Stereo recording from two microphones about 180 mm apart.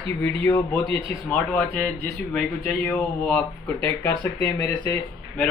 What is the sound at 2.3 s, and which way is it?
Speech, 10° left (ahead or behind).